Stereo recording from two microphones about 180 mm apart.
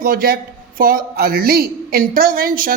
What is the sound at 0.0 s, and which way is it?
A man's voice, 55° right (ahead or behind).